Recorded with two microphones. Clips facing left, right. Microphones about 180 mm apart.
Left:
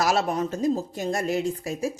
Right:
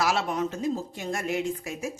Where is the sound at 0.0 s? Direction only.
40° left (ahead or behind).